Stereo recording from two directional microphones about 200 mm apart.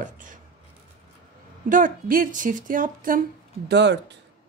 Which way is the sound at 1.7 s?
40° right (ahead or behind).